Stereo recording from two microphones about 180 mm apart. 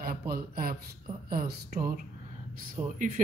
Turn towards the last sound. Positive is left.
turn(degrees=-45)  # may be behind; listen again after turning